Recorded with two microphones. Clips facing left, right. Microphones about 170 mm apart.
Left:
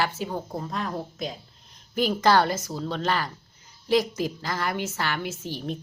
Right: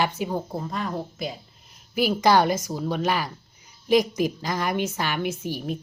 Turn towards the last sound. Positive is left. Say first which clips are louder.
# right 3 dB
turn(degrees=-10)  # may be behind; listen again after turning